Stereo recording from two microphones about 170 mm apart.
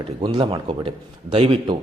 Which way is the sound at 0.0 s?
30° right (ahead or behind).